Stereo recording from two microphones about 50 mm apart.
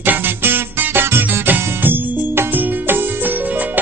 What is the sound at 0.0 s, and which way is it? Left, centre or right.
Music, right.